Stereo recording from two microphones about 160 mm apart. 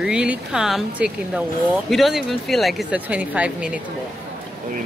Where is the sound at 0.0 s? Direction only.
5° right (ahead or behind).